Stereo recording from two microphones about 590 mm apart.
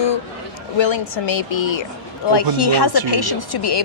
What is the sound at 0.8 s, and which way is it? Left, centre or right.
A woman's voice, left.